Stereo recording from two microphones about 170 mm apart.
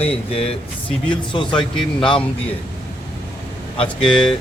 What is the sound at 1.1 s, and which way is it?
Speech, 30° left (ahead or behind).